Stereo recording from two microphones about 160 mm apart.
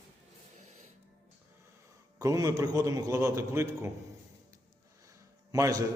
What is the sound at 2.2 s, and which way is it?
A man's voice, 20° right (ahead or behind).